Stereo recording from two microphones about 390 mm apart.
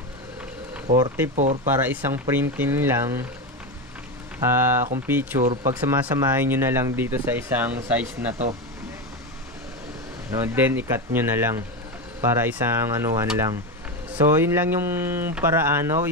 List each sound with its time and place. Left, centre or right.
0.8 s speech: centre
1.3 s speech: centre
1.7 s speech: centre
4.4 s speech: centre
10.3 s speech: centre